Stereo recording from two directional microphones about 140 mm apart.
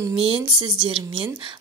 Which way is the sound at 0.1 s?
40° right (ahead or behind).